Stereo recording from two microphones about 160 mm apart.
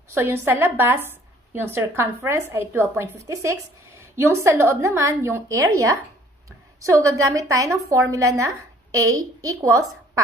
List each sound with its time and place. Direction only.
0.1 s a woman's voice: 15° right (ahead or behind)